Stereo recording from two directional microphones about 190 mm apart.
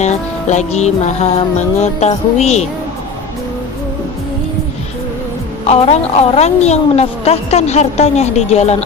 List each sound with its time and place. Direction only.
0.0 s a woman's voice: 35° left (ahead or behind)
5.6 s a woman's voice: 35° left (ahead or behind)